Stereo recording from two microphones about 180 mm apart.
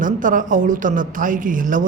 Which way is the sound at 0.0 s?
45° right (ahead or behind).